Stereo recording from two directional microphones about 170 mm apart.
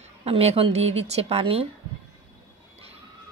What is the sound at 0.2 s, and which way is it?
Speech, 35° right (ahead or behind).